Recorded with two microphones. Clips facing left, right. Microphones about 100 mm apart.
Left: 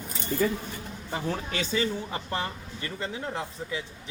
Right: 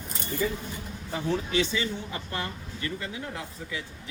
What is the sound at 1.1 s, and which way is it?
A man's voice, 40° left (ahead or behind).